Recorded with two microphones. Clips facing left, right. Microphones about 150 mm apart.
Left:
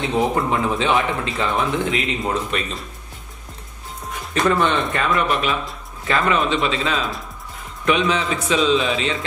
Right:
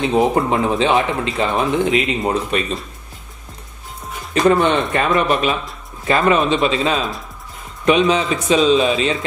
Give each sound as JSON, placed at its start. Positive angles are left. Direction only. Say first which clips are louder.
{"t": 0.0, "sound": "speech", "louder": "right 4 dB", "side_deg": -25}
{"t": 4.3, "sound": "speech", "louder": "right 4 dB", "side_deg": -20}